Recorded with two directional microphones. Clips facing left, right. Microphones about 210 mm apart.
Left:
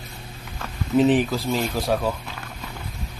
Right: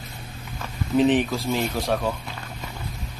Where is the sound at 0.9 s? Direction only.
5° left (ahead or behind).